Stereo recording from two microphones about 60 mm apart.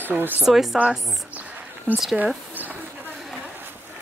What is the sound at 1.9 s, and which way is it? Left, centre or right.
Speech, right.